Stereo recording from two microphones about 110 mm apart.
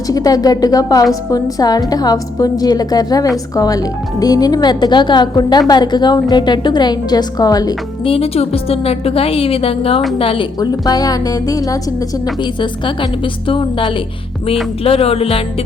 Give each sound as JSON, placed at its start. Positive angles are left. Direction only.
{"t": 0.1, "sound": "speech", "side_deg": 35}
{"t": 8.0, "sound": "a woman's voice", "side_deg": 60}
{"t": 10.6, "sound": "speech", "side_deg": 35}
{"t": 12.4, "sound": "speech", "side_deg": 45}
{"t": 14.8, "sound": "a woman's voice", "side_deg": 65}